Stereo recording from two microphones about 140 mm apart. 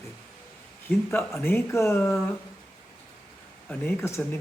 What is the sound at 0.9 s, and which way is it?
Speech, 15° left (ahead or behind).